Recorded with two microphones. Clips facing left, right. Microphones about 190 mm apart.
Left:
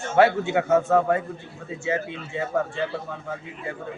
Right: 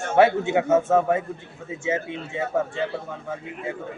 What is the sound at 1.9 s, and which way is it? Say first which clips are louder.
Speech: right 1 dB; 20° right (ahead or behind).